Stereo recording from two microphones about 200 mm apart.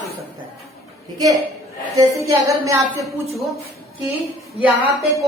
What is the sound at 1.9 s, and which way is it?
Speech, 15° right (ahead or behind).